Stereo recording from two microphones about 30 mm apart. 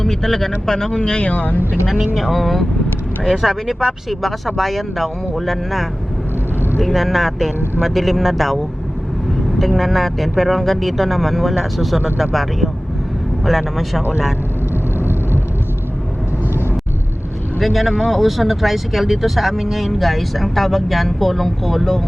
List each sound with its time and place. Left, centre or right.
0.0 s speech: centre
0.7 s speech: left
2.1 s speech: centre
17.6 s speech: centre